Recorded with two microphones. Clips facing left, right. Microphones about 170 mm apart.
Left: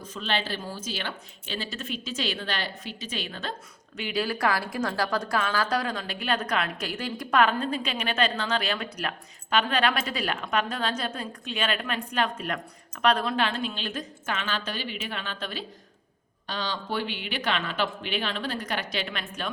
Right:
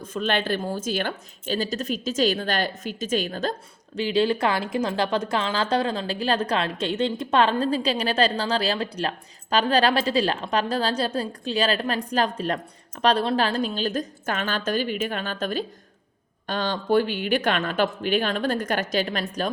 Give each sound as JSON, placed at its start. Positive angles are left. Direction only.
{"t": 0.1, "sound": "speech", "side_deg": -50}
{"t": 3.9, "sound": "a woman's voice", "side_deg": -30}